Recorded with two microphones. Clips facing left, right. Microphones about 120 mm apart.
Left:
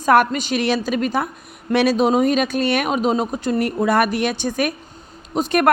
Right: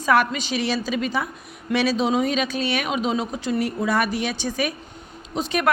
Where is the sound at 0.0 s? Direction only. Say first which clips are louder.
Left 4 dB; 50° left (ahead or behind).